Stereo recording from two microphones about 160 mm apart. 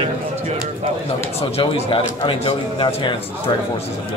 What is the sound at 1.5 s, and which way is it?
A man's voice, 35° left (ahead or behind).